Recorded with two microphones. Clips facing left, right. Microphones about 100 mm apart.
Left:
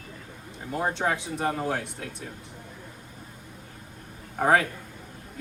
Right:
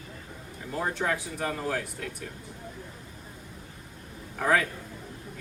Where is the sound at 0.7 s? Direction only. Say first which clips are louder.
Left 2 dB; 25° left (ahead or behind).